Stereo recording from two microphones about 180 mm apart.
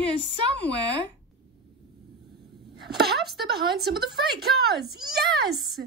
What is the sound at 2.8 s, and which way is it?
A woman's voice, 65° right (ahead or behind).